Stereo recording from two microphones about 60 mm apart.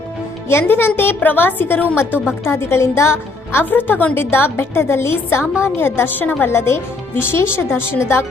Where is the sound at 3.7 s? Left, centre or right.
Left.